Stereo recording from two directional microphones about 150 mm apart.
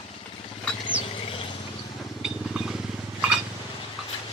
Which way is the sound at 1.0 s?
40° left (ahead or behind).